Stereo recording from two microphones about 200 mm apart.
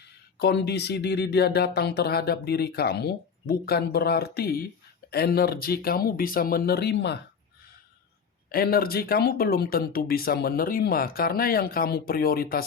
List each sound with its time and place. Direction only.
0.3 s speech: 55° left (ahead or behind)
8.4 s speech: 50° left (ahead or behind)